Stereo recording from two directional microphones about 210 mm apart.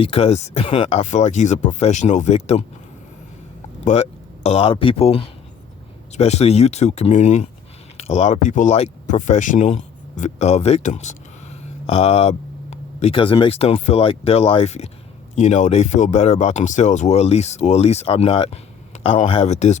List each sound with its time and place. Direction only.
0.0 s speech: 30° left (ahead or behind)
4.4 s speech: 30° left (ahead or behind)